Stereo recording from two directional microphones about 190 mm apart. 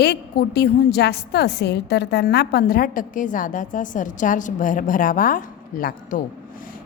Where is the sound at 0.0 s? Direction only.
60° left (ahead or behind).